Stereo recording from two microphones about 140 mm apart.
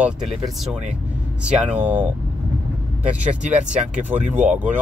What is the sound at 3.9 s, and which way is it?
Speech, 10° right (ahead or behind).